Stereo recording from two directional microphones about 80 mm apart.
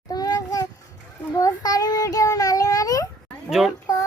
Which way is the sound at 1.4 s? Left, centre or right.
Left.